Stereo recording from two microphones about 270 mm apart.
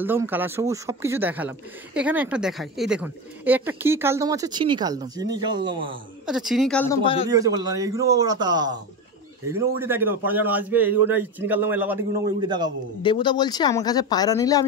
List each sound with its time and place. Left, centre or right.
0.0 s speech: centre
6.2 s a woman's voice: centre
7.2 s speech: centre
13.0 s speech: centre